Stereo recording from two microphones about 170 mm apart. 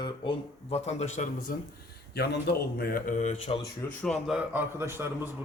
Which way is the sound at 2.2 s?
70° left (ahead or behind).